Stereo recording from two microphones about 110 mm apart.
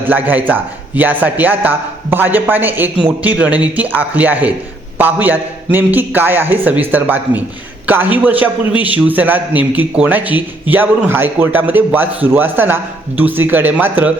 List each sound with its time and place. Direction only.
0.1 s a man's voice: 15° right (ahead or behind)